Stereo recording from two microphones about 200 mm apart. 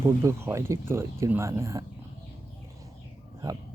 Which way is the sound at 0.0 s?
15° right (ahead or behind).